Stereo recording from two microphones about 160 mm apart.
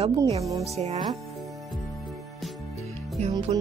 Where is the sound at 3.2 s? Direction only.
45° right (ahead or behind).